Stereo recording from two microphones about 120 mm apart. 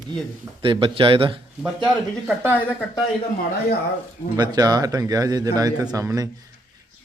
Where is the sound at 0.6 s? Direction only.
45° right (ahead or behind).